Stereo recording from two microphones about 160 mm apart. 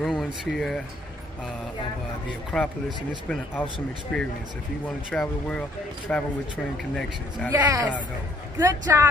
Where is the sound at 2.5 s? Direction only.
5° left (ahead or behind).